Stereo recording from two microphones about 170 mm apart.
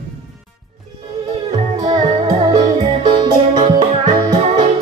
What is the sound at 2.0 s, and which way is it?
Music, 35° right (ahead or behind).